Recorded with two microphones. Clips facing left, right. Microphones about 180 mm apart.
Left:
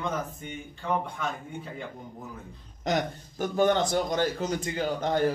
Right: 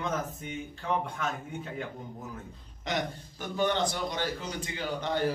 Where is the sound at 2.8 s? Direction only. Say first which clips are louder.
Left 5 dB; 45° left (ahead or behind).